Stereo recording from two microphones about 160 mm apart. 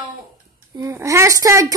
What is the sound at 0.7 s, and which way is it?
Speech, 20° right (ahead or behind).